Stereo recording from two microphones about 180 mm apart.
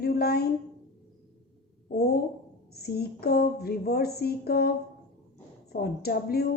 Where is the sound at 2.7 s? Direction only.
60° left (ahead or behind).